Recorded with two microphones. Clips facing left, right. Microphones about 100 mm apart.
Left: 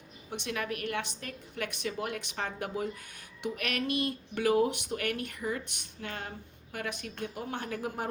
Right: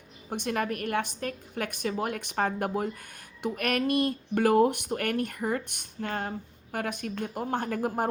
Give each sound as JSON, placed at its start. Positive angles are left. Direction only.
{"t": 0.3, "sound": "speech", "side_deg": -45}